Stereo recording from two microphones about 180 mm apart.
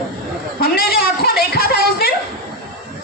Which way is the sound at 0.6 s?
55° left (ahead or behind).